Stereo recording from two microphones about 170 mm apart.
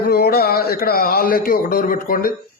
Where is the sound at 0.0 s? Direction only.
65° left (ahead or behind).